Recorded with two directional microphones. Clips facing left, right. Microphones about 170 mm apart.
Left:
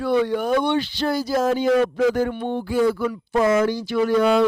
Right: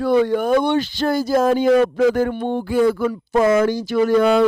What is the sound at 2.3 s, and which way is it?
Speech, 40° right (ahead or behind).